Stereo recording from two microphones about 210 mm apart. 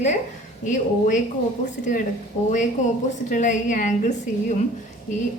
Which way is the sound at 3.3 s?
35° left (ahead or behind).